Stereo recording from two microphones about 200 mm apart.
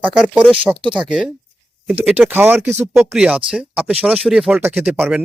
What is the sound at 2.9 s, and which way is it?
Speech, centre (ahead or behind).